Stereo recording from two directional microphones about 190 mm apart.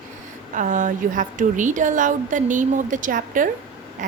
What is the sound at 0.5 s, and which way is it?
A woman's voice, 45° right (ahead or behind).